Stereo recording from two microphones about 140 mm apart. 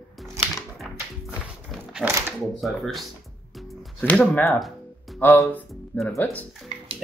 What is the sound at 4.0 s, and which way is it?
Speech, 10° left (ahead or behind).